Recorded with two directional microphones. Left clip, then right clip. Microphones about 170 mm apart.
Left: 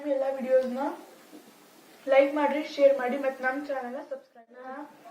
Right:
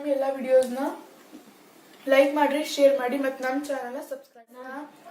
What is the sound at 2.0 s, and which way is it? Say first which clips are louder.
A woman's voice: right 2 dB; 40° right (ahead or behind).